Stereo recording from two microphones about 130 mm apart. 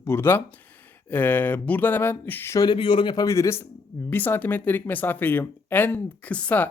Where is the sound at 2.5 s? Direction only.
35° left (ahead or behind).